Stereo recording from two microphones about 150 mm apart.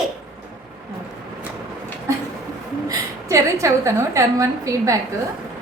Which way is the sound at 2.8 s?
20° right (ahead or behind).